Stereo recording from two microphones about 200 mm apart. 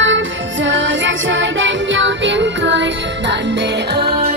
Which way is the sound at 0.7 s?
65° right (ahead or behind).